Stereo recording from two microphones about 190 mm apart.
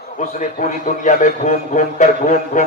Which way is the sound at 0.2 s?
40° left (ahead or behind).